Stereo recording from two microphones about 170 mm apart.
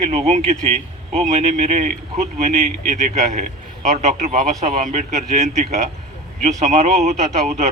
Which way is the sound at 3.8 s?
40° right (ahead or behind).